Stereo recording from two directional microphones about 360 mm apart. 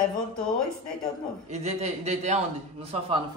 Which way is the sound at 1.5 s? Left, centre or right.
Centre.